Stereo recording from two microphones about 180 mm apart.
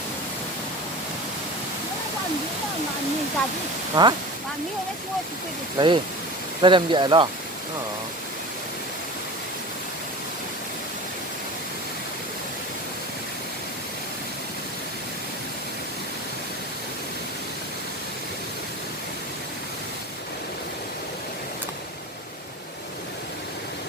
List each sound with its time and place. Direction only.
4.0 s speech: 25° right (ahead or behind)
5.7 s speech: 25° right (ahead or behind)